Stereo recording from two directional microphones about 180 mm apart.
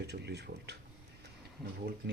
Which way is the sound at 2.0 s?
60° right (ahead or behind).